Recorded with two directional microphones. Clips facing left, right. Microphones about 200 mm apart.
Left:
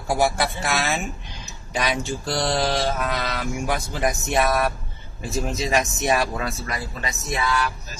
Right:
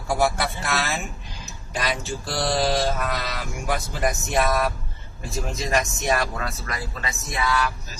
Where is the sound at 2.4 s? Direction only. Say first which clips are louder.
Right 1 dB; centre (ahead or behind).